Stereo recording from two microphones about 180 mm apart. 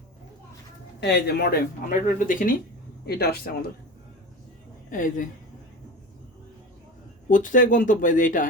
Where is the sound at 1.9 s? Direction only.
45° left (ahead or behind).